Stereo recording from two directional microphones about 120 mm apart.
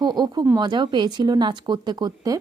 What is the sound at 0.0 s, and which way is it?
Speech, 35° right (ahead or behind).